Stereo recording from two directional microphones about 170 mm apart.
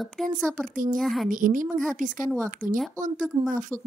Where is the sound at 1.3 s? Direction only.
50° right (ahead or behind).